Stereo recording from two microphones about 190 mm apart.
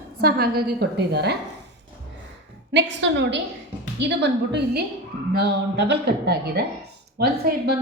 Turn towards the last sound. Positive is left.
turn(degrees=-55)  # may be behind; listen again after turning